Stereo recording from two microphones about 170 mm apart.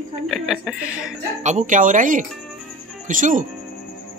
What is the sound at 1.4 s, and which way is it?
Speech, 45° right (ahead or behind).